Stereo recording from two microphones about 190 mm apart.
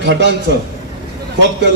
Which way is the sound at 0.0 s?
65° right (ahead or behind).